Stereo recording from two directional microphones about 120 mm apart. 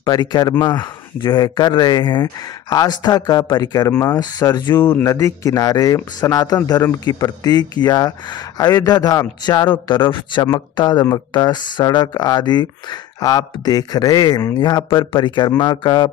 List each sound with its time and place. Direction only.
0.0 s speech: 35° left (ahead or behind)
4.7 s speech: 20° left (ahead or behind); by 16.1 s 40° left (ahead or behind)